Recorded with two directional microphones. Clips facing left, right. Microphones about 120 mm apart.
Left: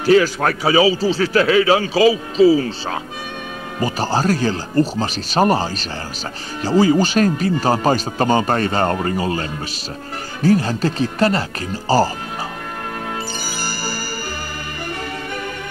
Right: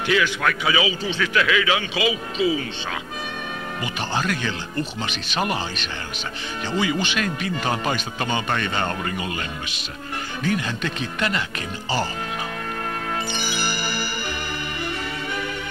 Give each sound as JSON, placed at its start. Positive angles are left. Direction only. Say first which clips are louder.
{"t": 0.0, "sound": "speech", "louder": "left 7 dB", "side_deg": 40}
{"t": 13.3, "sound": "music", "louder": "even", "side_deg": 40}